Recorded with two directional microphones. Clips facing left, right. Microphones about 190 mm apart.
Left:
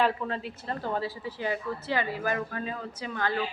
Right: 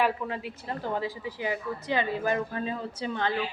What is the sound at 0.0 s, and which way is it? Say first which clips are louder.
A woman's voice: even; 10° right (ahead or behind).